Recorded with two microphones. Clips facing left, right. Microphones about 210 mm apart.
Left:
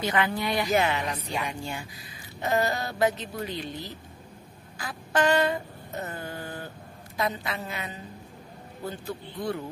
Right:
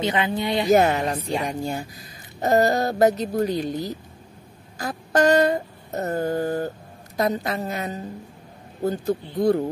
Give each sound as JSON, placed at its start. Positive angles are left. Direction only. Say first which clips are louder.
{"t": 0.0, "sound": "speech", "louder": "right 4 dB", "side_deg": -20}
{"t": 0.7, "sound": "a woman's voice", "louder": "right 10 dB", "side_deg": -45}
{"t": 1.0, "sound": "speech", "louder": "right 7 dB", "side_deg": -30}
{"t": 1.4, "sound": "speech", "louder": "right 7 dB", "side_deg": -40}
{"t": 4.7, "sound": "a sound", "louder": "right 6 dB", "side_deg": -40}
{"t": 7.2, "sound": "a woman's voice", "louder": "right 7 dB", "side_deg": -45}